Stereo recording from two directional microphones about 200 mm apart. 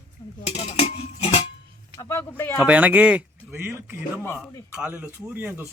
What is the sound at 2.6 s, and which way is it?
Speech, 5° right (ahead or behind).